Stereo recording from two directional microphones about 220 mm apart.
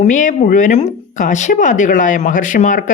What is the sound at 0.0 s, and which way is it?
Speech, 35° left (ahead or behind).